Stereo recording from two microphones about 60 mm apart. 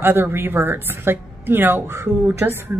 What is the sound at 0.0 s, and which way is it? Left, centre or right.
A woman's voice, right.